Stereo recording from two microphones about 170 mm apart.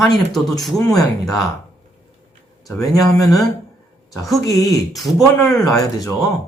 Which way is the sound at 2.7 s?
20° left (ahead or behind).